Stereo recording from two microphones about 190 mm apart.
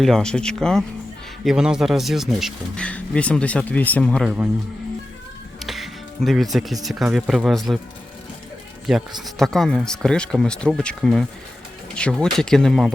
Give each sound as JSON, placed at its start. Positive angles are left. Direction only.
{"t": 0.0, "sound": "speech", "side_deg": 0}
{"t": 5.5, "sound": "music", "side_deg": 0}
{"t": 6.8, "sound": "speech", "side_deg": -5}
{"t": 8.9, "sound": "speech", "side_deg": 0}